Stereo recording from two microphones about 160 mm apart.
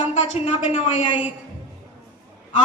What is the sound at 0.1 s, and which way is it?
Speech, 45° left (ahead or behind).